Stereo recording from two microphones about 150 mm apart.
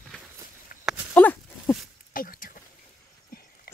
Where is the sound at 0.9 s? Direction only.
10° left (ahead or behind).